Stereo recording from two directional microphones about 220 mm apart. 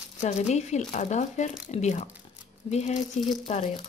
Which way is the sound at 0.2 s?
30° left (ahead or behind).